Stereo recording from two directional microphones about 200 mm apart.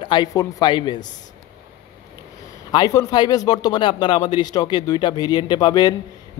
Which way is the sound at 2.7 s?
15° left (ahead or behind).